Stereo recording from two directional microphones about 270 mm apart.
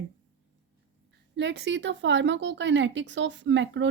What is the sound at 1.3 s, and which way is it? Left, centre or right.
A woman's voice, right.